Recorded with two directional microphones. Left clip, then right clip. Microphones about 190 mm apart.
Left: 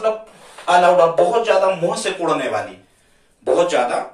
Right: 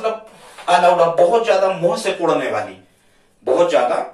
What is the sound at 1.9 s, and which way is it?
Speech, 30° left (ahead or behind).